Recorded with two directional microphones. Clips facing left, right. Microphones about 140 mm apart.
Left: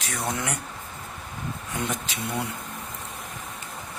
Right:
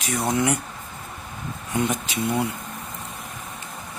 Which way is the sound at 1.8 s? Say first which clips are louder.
Right 5 dB; 10° right (ahead or behind).